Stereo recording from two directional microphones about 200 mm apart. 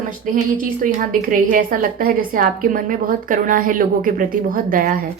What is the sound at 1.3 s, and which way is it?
A woman's voice, 40° right (ahead or behind).